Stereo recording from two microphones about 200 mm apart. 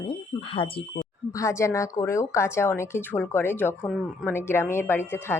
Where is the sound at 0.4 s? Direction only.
25° left (ahead or behind).